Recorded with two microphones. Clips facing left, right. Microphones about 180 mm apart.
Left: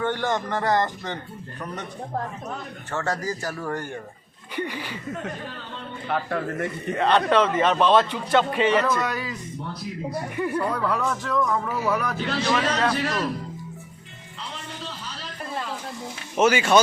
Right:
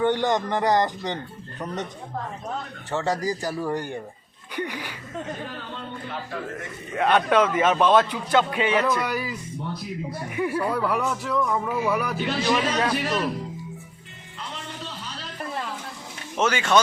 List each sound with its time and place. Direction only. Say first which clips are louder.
0.0 s speech: right 3 dB; 15° right (ahead or behind)
2.9 s speech: right 2 dB; 15° right (ahead or behind)
6.1 s speech: left 8 dB; 60° left (ahead or behind)
6.9 s speech: even; 10° right (ahead or behind)
16.4 s speech: left 3 dB; 10° left (ahead or behind)